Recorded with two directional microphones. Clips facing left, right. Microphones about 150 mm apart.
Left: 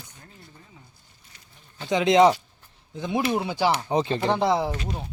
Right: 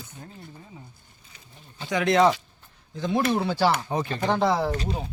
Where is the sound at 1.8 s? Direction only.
20° left (ahead or behind).